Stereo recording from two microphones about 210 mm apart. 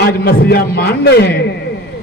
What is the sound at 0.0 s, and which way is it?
A man's voice, 50° left (ahead or behind).